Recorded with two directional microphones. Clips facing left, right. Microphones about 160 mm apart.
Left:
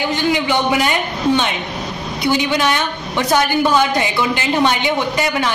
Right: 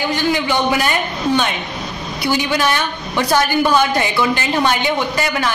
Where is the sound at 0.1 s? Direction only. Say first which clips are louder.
Left 1 dB; 20° left (ahead or behind).